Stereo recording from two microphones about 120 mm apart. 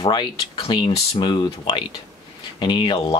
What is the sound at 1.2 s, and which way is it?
Speech, 45° left (ahead or behind).